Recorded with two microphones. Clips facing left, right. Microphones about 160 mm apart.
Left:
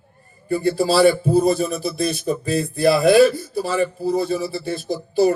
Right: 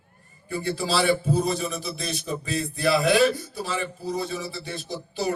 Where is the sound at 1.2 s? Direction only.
40° left (ahead or behind).